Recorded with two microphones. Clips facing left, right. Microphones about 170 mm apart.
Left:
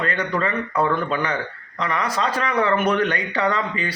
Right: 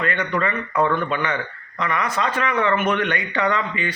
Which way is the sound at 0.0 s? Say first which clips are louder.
Even; 35° left (ahead or behind).